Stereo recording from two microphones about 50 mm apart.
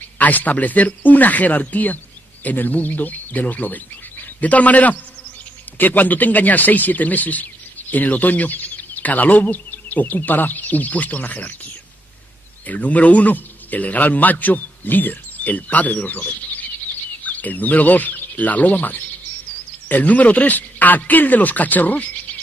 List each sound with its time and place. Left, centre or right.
0.2 s a man's voice: left